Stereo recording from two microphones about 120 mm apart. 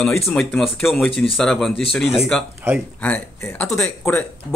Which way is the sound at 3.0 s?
15° left (ahead or behind).